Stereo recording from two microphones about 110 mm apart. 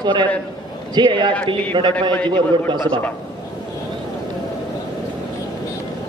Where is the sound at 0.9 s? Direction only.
45° right (ahead or behind).